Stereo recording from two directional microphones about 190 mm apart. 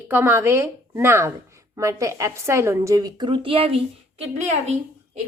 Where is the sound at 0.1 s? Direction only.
10° right (ahead or behind); by 4.8 s 35° right (ahead or behind).